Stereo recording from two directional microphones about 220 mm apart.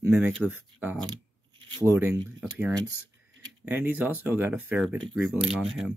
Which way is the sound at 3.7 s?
10° right (ahead or behind).